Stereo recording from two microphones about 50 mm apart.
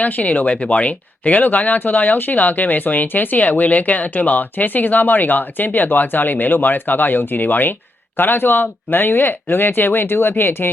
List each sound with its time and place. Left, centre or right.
0.0 s speech: left